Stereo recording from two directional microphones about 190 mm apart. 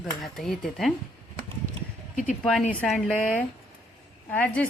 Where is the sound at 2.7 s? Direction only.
5° left (ahead or behind).